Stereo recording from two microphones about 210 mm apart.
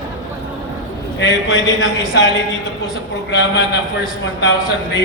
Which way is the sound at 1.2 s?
60° left (ahead or behind).